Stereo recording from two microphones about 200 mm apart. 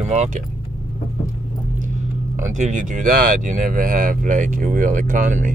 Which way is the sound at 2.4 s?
40° right (ahead or behind).